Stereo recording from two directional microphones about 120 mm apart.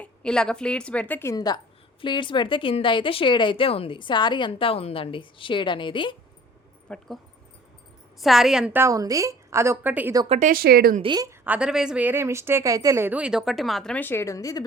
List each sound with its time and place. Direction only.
0.0 s a woman's voice: 5° left (ahead or behind)
1.3 s a woman's voice: 35° left (ahead or behind)
6.8 s speech: 5° left (ahead or behind)
8.2 s speech: 5° right (ahead or behind)
8.7 s speech: 25° right (ahead or behind)
10.2 s speech: 60° right (ahead or behind)
11.0 s a woman's voice: 35° right (ahead or behind)
11.3 s speech: 15° right (ahead or behind)
13.1 s speech: 10° right (ahead or behind)
13.9 s a woman's voice: 15° left (ahead or behind)